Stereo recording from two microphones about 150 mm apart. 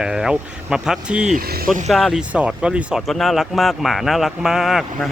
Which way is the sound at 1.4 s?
90° right.